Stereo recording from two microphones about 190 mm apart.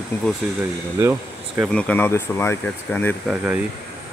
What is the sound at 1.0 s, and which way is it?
Speech, 15° right (ahead or behind).